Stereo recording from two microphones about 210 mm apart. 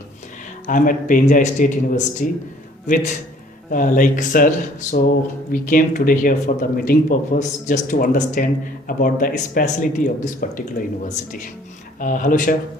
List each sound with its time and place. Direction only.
0.7 s speech: 40° left (ahead or behind)
11.9 s speech: 40° left (ahead or behind)